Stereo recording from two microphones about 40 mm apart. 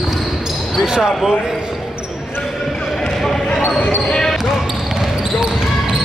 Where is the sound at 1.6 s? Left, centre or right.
Right.